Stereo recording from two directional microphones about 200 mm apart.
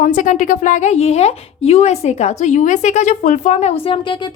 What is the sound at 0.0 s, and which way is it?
A woman's voice, 40° left (ahead or behind).